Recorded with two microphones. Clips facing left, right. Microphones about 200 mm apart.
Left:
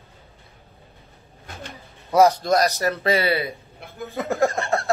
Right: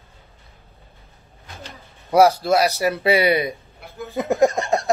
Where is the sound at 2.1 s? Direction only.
15° right (ahead or behind).